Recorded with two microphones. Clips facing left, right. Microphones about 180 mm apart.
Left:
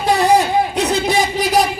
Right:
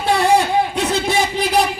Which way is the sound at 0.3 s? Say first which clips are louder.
Left 1 dB; 40° left (ahead or behind).